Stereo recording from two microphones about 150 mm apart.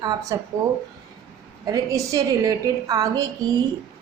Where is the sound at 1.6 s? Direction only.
20° right (ahead or behind).